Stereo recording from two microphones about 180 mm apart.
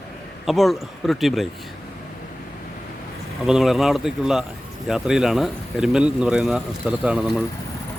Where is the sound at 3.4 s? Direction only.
Centre (ahead or behind).